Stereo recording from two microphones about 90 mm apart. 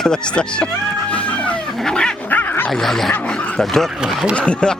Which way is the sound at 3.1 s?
15° left (ahead or behind).